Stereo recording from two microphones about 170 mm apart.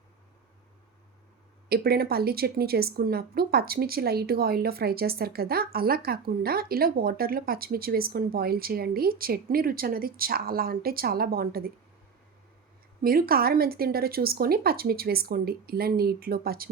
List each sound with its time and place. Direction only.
1.7 s speech: 65° right (ahead or behind)
13.0 s speech: 60° right (ahead or behind)